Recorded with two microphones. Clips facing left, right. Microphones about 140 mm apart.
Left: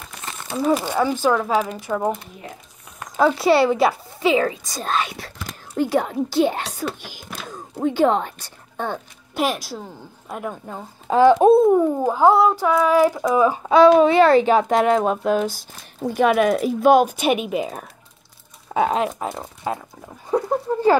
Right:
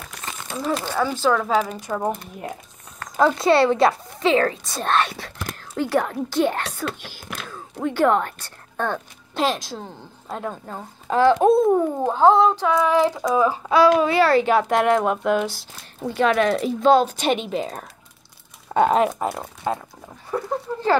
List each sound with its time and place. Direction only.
0.2 s speech: 5° left (ahead or behind)
1.9 s a woman's voice: centre (ahead or behind)
3.2 s a woman's voice: 5° left (ahead or behind)
5.8 s a woman's voice: 15° left (ahead or behind)
16.1 s a woman's voice: 10° left (ahead or behind)
20.2 s a sound: 20° left (ahead or behind)